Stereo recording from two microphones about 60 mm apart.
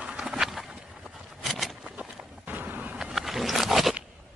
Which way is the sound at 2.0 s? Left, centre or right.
Right.